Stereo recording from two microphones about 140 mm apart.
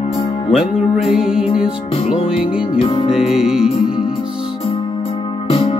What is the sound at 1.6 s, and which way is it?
Music, 40° left (ahead or behind).